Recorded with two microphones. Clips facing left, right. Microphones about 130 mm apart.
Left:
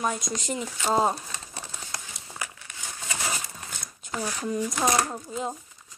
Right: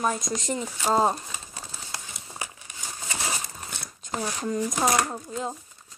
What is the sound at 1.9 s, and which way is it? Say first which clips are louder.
Crumpling: even; 20° right (ahead or behind).